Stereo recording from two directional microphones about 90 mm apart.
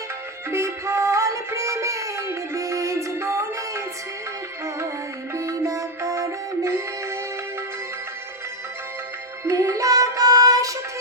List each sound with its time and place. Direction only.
0.5 s music: 30° right (ahead or behind)
5.3 s music: 35° right (ahead or behind)
9.4 s music: 35° right (ahead or behind)